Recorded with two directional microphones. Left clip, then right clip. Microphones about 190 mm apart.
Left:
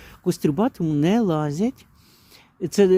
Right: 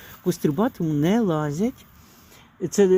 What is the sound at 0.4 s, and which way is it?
Speech, 30° left (ahead or behind).